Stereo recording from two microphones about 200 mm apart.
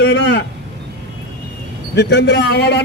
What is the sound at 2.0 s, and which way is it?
Speech, 60° left (ahead or behind).